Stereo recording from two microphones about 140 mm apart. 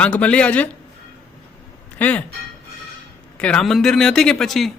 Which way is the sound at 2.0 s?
10° left (ahead or behind).